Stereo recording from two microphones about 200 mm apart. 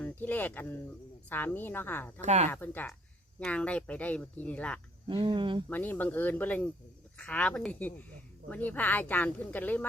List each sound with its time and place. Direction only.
0.0 s speech: 10° left (ahead or behind)
2.2 s speech: 35° right (ahead or behind)
2.5 s speech: 10° left (ahead or behind)
5.0 s speech: 25° right (ahead or behind)
5.6 s speech: 10° left (ahead or behind)